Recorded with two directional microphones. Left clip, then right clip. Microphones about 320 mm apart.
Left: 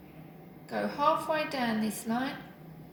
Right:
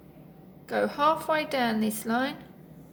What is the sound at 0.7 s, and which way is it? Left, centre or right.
A woman's voice, centre.